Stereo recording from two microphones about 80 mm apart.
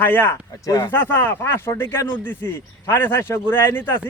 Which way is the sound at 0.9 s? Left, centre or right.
Left.